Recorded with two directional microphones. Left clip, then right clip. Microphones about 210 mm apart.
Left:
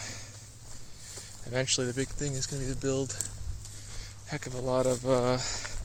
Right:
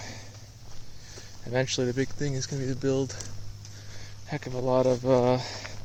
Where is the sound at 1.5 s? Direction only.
20° right (ahead or behind).